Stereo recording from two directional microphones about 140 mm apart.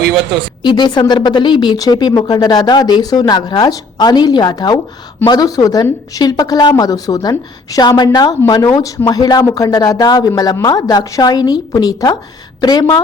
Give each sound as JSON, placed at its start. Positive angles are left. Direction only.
{"t": 0.6, "sound": "a woman's voice", "side_deg": 30}